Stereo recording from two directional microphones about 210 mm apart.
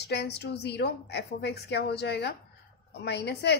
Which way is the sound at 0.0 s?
50° left (ahead or behind).